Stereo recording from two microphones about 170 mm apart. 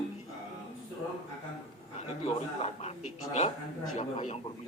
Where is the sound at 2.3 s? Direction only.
35° left (ahead or behind).